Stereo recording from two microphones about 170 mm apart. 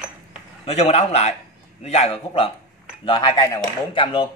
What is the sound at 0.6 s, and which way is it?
A man's voice, 35° left (ahead or behind).